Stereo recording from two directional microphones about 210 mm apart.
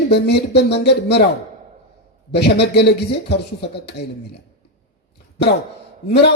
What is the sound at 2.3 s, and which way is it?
A man's voice, 50° left (ahead or behind).